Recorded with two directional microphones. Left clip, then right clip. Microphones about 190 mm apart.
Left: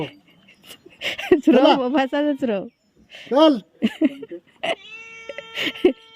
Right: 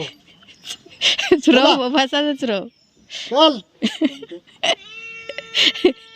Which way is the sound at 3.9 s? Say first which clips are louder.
Right 1 dB; 10° left (ahead or behind).